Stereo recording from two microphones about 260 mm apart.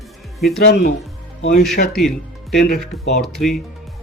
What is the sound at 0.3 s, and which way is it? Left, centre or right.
Speech, centre.